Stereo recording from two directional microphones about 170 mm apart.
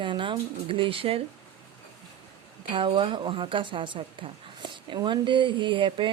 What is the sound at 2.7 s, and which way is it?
Speech, 30° right (ahead or behind).